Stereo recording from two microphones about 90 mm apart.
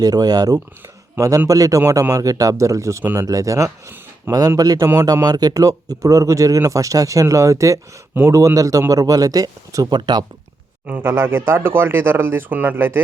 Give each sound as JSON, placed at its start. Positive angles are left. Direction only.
{"t": 0.0, "sound": "speech", "side_deg": -45}
{"t": 3.0, "sound": "speech", "side_deg": -20}
{"t": 3.2, "sound": "speech", "side_deg": -40}
{"t": 10.8, "sound": "speech", "side_deg": -25}